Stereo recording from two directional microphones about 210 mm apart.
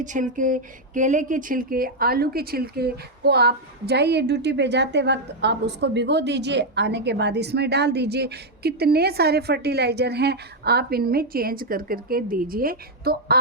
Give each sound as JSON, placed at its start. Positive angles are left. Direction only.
{"t": 0.0, "sound": "speech", "side_deg": -35}